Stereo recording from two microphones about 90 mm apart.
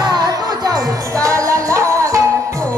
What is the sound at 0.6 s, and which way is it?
Music, 40° right (ahead or behind).